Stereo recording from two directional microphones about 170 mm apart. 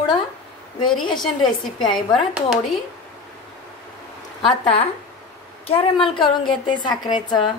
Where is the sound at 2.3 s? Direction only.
5° right (ahead or behind).